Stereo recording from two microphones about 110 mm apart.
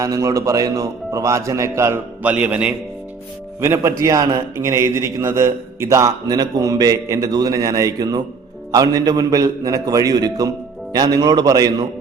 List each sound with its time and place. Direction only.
0.0 s a man's voice: 30° right (ahead or behind); by 2.7 s 10° right (ahead or behind)
3.6 s a man's voice: 25° right (ahead or behind)